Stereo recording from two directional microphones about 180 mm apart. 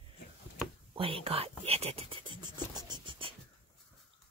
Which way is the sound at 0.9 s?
30° right (ahead or behind).